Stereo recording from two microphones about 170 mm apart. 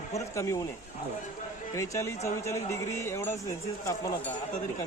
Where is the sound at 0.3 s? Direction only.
20° left (ahead or behind).